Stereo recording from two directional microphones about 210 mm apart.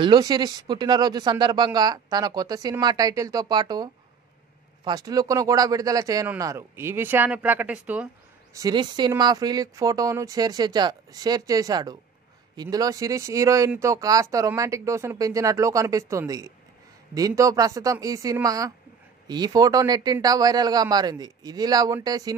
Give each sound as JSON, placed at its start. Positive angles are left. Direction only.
{"t": 0.0, "sound": "speech", "side_deg": -20}
{"t": 8.5, "sound": "speech", "side_deg": -20}